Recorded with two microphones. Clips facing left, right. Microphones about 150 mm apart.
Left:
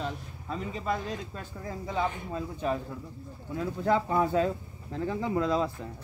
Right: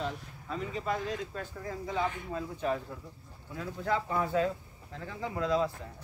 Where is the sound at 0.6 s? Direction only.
30° left (ahead or behind).